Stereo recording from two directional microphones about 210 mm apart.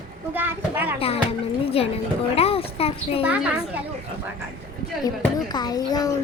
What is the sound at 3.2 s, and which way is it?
Speech, 5° right (ahead or behind).